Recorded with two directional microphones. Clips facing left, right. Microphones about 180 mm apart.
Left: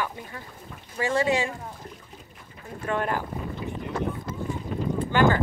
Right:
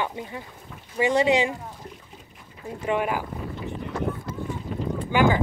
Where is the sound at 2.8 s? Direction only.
10° right (ahead or behind).